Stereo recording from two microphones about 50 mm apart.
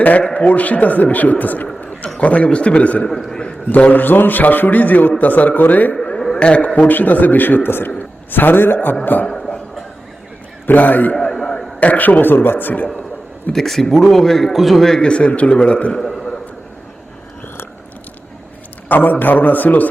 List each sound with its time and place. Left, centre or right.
0.0 s a man's voice: left
3.1 s speech: centre
3.7 s a man's voice: left
4.0 s a man's voice: left
6.4 s a man's voice: left
6.7 s a man's voice: left
10.7 s a man's voice: left
11.3 s a sound: centre
11.8 s a man's voice: left
13.5 s a man's voice: centre
15.0 s a man's voice: left
15.9 s a sound: centre
18.9 s a man's voice: left